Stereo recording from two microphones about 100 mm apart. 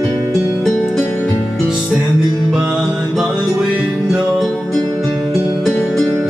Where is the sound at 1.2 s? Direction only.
5° left (ahead or behind).